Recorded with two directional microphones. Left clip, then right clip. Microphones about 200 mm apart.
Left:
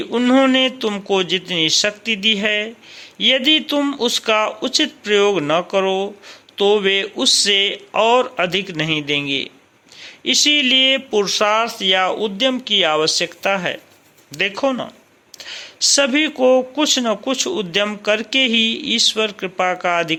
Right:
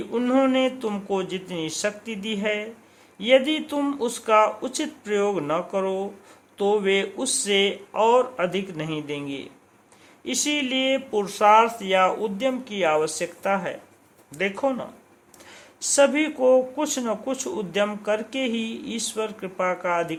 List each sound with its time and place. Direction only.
0.1 s speech: 15° left (ahead or behind)